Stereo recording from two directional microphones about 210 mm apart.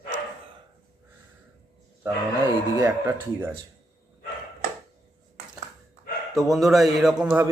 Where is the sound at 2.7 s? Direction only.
15° right (ahead or behind).